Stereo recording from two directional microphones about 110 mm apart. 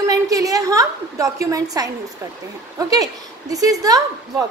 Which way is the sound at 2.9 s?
35° right (ahead or behind).